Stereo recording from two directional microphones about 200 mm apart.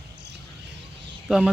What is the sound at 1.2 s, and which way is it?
Speech, centre (ahead or behind).